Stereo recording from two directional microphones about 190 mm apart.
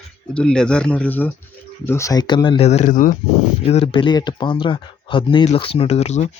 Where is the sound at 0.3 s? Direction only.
5° left (ahead or behind); by 3.2 s 45° left (ahead or behind).